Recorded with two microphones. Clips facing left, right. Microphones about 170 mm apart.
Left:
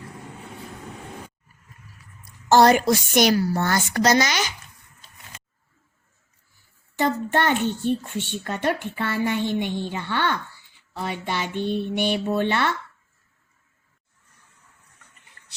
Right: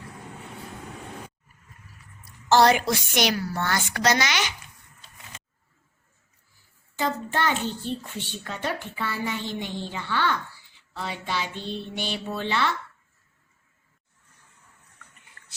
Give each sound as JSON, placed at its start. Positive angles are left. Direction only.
{"t": 2.5, "sound": "a woman's voice", "side_deg": 45}
{"t": 7.0, "sound": "a child's voice", "side_deg": 60}